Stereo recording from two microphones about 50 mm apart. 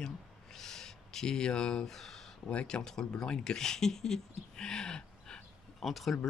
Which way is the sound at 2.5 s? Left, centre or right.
Left.